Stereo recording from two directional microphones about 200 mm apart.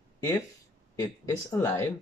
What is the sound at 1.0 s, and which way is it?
Speech, 15° left (ahead or behind).